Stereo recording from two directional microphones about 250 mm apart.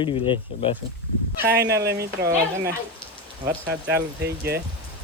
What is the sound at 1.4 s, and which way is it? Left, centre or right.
Speech, right.